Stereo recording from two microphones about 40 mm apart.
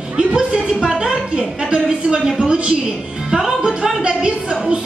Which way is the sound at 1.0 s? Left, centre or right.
Right.